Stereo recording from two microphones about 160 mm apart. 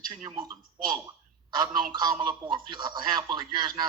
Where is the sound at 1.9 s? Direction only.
25° right (ahead or behind).